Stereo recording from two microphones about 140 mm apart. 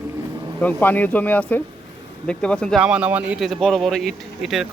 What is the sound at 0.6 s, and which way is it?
Speech, 10° left (ahead or behind).